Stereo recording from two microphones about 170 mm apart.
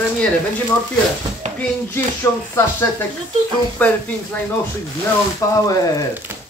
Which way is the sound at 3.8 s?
5° left (ahead or behind).